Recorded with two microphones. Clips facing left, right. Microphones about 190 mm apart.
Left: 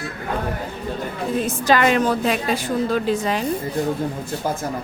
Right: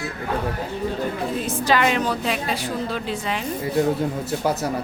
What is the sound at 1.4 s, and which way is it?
A woman's voice, 45° left (ahead or behind).